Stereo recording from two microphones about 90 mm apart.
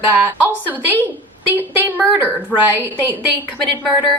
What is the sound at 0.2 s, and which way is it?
A woman's voice, 25° right (ahead or behind).